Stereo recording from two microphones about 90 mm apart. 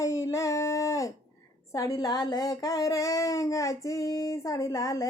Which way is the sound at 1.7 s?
40° left (ahead or behind).